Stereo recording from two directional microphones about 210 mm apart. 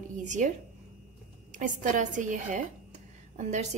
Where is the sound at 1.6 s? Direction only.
35° right (ahead or behind).